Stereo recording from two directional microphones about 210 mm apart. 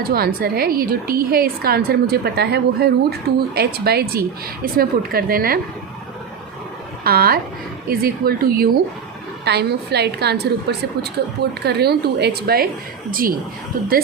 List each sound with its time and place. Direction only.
0.0 s a woman's voice: 45° right (ahead or behind)
7.0 s a woman's voice: 45° right (ahead or behind)